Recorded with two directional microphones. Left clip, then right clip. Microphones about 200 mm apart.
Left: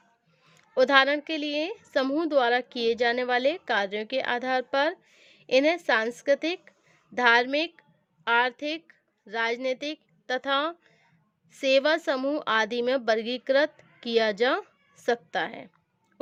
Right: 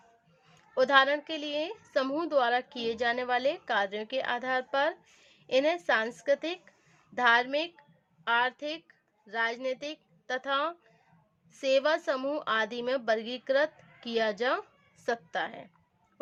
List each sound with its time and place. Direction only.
0.5 s a woman's voice: 40° left (ahead or behind)